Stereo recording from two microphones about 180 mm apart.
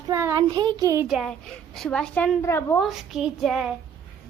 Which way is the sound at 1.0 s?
Centre (ahead or behind).